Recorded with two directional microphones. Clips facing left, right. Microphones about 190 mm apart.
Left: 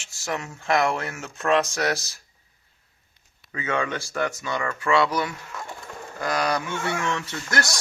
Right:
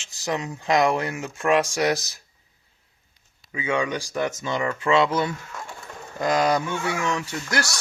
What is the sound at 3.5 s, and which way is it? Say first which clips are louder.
Speech: right 2 dB; 15° right (ahead or behind).